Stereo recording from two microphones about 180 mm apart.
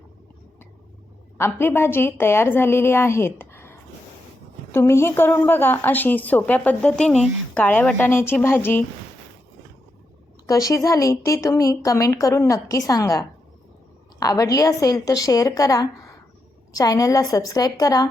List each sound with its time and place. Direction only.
1.4 s a woman's voice: 15° left (ahead or behind)
10.5 s speech: 20° left (ahead or behind)